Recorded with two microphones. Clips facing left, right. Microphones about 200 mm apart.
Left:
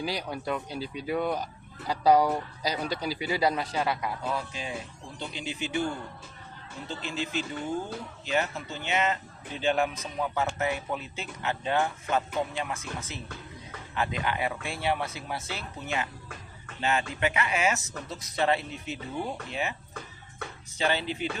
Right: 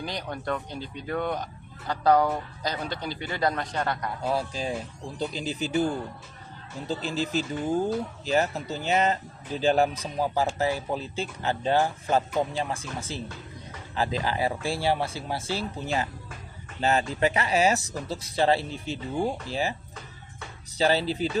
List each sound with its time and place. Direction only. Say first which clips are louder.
0.0 s a man's voice: left 1 dB; 10° left (ahead or behind)
4.3 s speech: right 9 dB; 35° right (ahead or behind)
20.7 s speech: right 5 dB; 35° right (ahead or behind)